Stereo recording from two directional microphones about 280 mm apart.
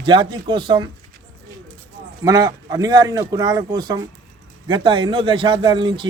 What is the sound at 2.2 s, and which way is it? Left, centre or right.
A man's voice, centre.